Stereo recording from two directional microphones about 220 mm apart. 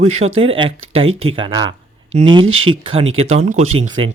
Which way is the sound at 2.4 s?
70° right (ahead or behind).